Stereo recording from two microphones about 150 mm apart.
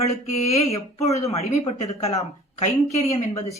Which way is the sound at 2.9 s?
45° left (ahead or behind).